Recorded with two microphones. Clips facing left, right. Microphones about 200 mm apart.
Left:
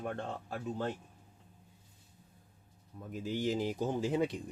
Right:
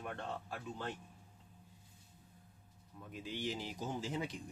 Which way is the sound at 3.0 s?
45° left (ahead or behind).